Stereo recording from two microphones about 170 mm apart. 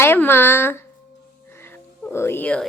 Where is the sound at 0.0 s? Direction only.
15° left (ahead or behind).